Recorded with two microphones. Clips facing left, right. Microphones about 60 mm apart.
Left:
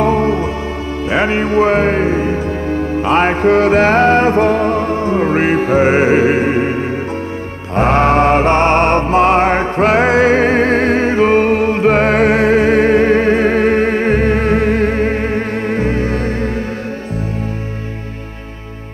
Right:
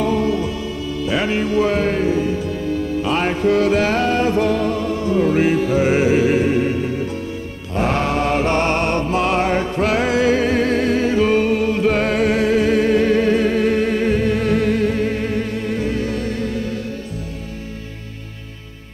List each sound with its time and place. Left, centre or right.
0.0 s music: left